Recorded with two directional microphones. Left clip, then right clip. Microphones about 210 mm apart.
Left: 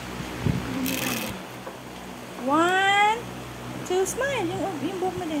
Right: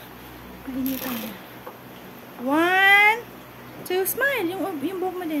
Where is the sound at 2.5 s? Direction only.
15° right (ahead or behind).